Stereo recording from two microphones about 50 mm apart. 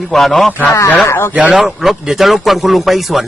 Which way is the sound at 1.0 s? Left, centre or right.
Left.